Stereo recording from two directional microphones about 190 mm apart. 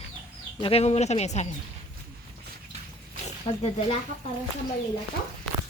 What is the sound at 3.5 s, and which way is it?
Speech, 35° left (ahead or behind).